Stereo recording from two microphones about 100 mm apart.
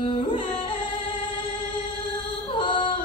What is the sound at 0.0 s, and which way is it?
Music, 55° left (ahead or behind).